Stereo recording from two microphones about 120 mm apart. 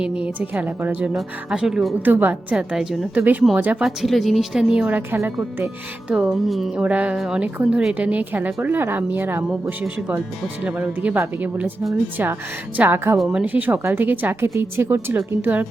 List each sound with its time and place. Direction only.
0.0 s a woman's voice: 10° right (ahead or behind)
2.0 s a woman's voice: 15° right (ahead or behind)
3.8 s a woman's voice: centre (ahead or behind); by 6.1 s 15° right (ahead or behind)
6.1 s a woman's voice: 5° right (ahead or behind)
6.8 s a woman's voice: 10° right (ahead or behind)
9.5 s a woman's voice: 5° right (ahead or behind)